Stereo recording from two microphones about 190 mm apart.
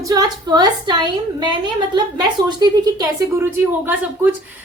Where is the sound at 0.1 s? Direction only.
20° right (ahead or behind).